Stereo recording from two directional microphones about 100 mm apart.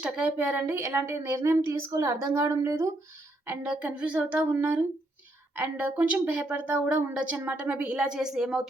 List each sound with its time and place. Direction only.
0.0 s a woman's voice: 15° right (ahead or behind); by 2.9 s 30° right (ahead or behind)
3.8 s a woman's voice: 15° right (ahead or behind)